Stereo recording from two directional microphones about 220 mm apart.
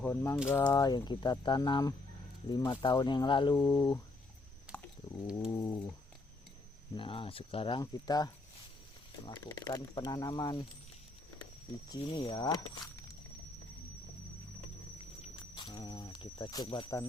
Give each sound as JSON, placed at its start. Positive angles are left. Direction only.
{"t": 0.0, "sound": "speech", "side_deg": 10}
{"t": 4.7, "sound": "a sound", "side_deg": -5}
{"t": 5.0, "sound": "speech", "side_deg": 25}
{"t": 6.9, "sound": "speech", "side_deg": 25}
{"t": 11.9, "sound": "speech", "side_deg": 20}
{"t": 15.2, "sound": "a sound", "side_deg": 20}